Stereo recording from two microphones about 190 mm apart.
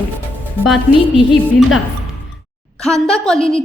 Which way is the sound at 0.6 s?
Centre (ahead or behind).